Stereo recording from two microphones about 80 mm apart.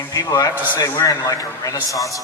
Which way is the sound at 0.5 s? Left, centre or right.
Right.